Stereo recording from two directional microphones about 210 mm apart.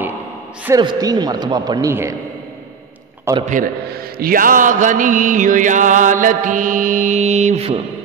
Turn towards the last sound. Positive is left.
turn(degrees=-30)  # may be behind; listen again after turning